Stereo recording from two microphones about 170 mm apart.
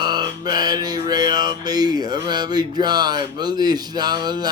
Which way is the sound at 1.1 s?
25° right (ahead or behind).